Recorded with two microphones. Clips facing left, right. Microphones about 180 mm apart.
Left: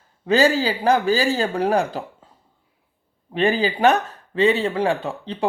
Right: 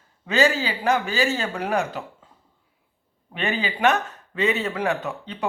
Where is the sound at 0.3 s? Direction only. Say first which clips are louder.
Left 4 dB; 35° left (ahead or behind).